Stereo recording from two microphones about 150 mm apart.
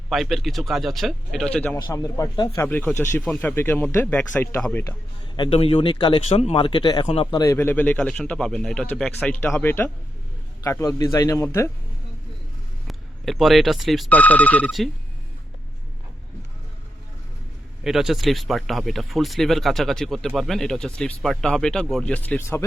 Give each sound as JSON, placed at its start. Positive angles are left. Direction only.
{"t": 0.1, "sound": "speech", "side_deg": 0}
{"t": 2.6, "sound": "speech", "side_deg": 10}
{"t": 5.4, "sound": "speech", "side_deg": 40}
{"t": 6.2, "sound": "a man's voice", "side_deg": 45}
{"t": 12.9, "sound": "speech", "side_deg": 0}
{"t": 14.1, "sound": "speech", "side_deg": 10}
{"t": 17.8, "sound": "speech", "side_deg": -5}